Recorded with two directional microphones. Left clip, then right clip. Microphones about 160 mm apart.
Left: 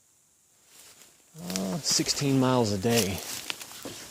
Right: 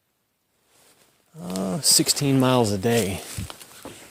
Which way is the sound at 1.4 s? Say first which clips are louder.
Right 6 dB; 75° right (ahead or behind).